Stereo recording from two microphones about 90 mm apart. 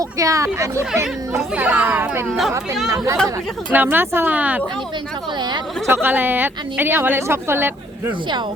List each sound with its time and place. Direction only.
0.0 s speech: 40° right (ahead or behind)
1.5 s speech: 15° right (ahead or behind)
2.8 s speech: 40° right (ahead or behind)
3.7 s a woman's voice: 20° right (ahead or behind)
5.9 s a woman's voice: 20° right (ahead or behind)